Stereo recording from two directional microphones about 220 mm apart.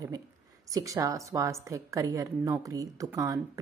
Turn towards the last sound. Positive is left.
turn(degrees=-15)  # may be behind; listen again after turning